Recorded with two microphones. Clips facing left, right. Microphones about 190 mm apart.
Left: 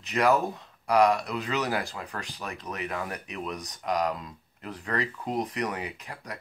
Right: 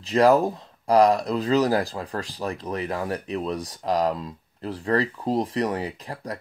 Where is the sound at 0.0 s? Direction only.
35° right (ahead or behind).